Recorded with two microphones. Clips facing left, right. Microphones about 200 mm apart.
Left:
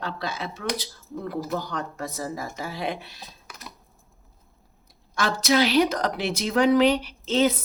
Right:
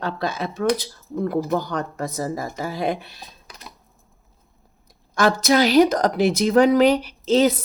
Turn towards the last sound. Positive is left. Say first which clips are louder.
# right 5 dB
turn(degrees=-40)  # may be behind; listen again after turning